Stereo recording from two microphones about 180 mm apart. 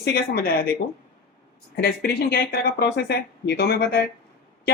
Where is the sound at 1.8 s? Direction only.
60° left (ahead or behind).